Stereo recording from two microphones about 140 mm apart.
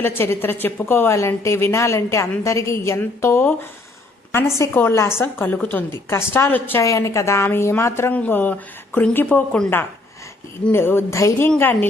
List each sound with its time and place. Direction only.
0.0 s a woman's voice: 15° left (ahead or behind)